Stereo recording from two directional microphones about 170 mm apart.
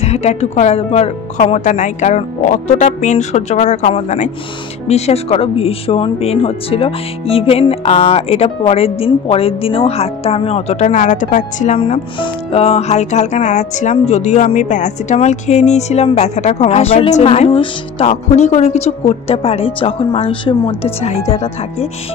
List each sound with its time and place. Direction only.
0.0 s speech: 40° left (ahead or behind)